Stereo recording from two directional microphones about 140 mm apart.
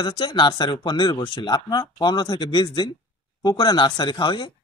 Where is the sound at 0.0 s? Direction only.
35° left (ahead or behind).